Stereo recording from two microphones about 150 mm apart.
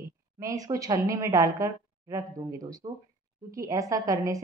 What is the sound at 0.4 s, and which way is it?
Speech, 25° right (ahead or behind).